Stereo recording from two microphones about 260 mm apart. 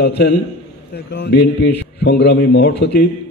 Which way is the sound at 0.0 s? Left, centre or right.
Left.